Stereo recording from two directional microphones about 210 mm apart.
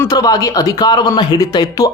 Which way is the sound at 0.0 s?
15° left (ahead or behind).